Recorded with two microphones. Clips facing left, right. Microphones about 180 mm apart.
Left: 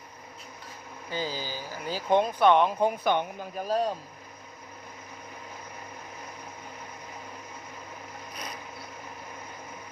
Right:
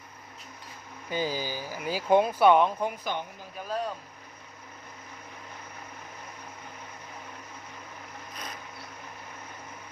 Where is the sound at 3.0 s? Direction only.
65° left (ahead or behind).